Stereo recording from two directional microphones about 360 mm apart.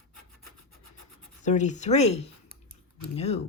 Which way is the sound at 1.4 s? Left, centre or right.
Centre.